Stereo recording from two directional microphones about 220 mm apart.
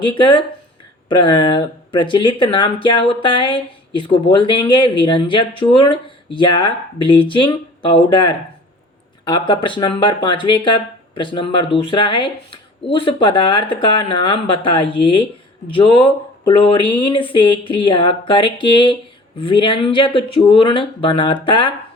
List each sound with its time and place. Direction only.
0.0 s speech: 25° left (ahead or behind)